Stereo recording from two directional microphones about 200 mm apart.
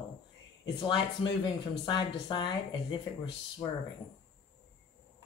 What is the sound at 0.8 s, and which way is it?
Speech, 25° left (ahead or behind).